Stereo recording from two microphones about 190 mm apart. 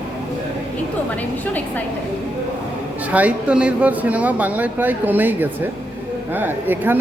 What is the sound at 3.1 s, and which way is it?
Speech, 5° right (ahead or behind).